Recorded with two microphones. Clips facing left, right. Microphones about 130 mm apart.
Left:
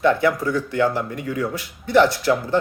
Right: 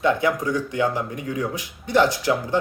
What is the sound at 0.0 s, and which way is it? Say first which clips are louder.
Speech: left 2 dB; 15° right (ahead or behind).